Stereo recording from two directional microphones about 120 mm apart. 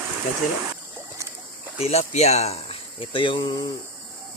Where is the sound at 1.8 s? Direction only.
65° left (ahead or behind).